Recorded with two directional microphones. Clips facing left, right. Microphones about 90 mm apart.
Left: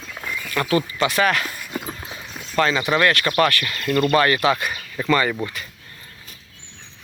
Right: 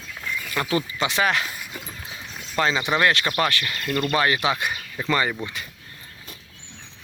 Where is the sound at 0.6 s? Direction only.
15° right (ahead or behind).